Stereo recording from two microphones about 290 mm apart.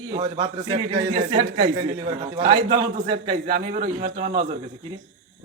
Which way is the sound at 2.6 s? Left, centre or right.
Right.